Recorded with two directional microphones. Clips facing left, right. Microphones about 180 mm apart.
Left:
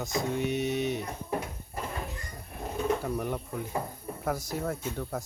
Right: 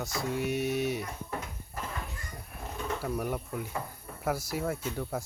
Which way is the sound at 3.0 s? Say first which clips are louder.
Left 1 dB; 5° right (ahead or behind).